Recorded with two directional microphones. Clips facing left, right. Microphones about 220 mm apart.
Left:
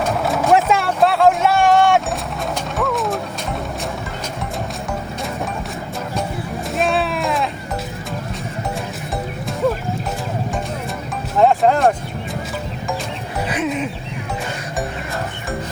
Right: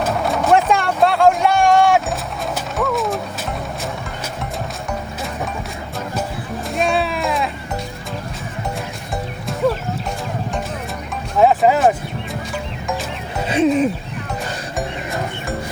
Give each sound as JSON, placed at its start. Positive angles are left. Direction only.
{"t": 0.0, "sound": "vehicle", "side_deg": 0}
{"t": 2.6, "sound": "mechanisms", "side_deg": 0}
{"t": 6.7, "sound": "sheep", "side_deg": 0}
{"t": 11.3, "sound": "music", "side_deg": -5}
{"t": 13.5, "sound": "music", "side_deg": -35}